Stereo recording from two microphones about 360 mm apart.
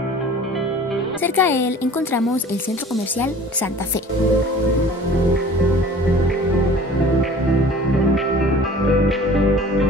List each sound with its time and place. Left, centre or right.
1.2 s a woman's voice: centre